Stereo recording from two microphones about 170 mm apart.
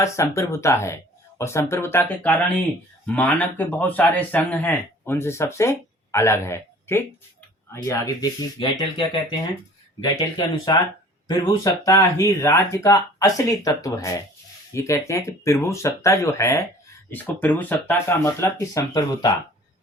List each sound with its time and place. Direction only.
0.0 s speech: 15° left (ahead or behind)